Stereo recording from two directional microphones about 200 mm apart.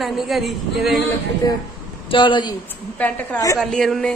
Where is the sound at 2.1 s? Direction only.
25° left (ahead or behind).